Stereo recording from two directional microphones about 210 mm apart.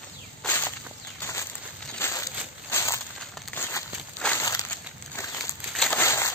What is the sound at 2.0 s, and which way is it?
Crushing, 15° left (ahead or behind).